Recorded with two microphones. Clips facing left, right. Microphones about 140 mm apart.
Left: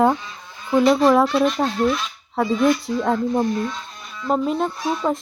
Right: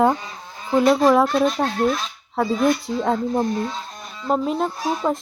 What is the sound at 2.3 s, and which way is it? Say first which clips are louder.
Speech: left 1 dB; centre (ahead or behind).